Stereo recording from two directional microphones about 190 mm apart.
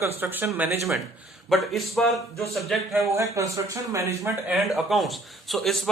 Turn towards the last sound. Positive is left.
turn(degrees=0)  # may be behind; listen again after turning